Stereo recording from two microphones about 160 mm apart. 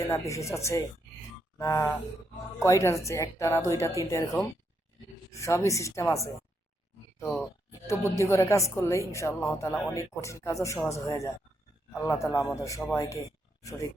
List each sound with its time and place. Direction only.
0.0 s a woman's voice: 20° left (ahead or behind)
7.3 s speech: centre (ahead or behind)
7.7 s speech: 20° left (ahead or behind)